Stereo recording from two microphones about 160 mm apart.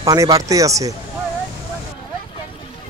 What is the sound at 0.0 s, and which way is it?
Speech, 20° right (ahead or behind).